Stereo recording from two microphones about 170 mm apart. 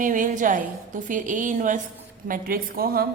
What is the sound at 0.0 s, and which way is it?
A woman's voice, 50° right (ahead or behind).